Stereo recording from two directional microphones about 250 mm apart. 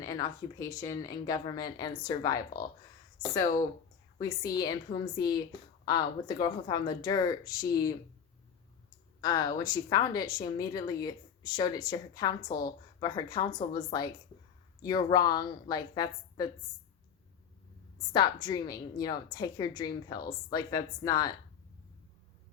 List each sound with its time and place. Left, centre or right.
0.0 s a woman's voice: centre
4.2 s a woman's voice: centre
9.2 s a woman's voice: centre
18.1 s a woman's voice: centre